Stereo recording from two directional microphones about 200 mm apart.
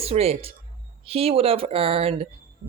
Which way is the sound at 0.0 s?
30° right (ahead or behind).